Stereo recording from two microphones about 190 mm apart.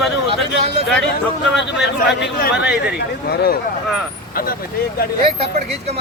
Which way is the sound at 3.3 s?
55° left (ahead or behind).